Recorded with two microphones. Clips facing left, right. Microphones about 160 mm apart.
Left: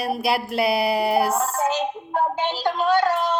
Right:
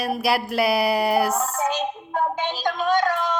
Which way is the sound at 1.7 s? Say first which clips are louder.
Left 2 dB; 10° left (ahead or behind).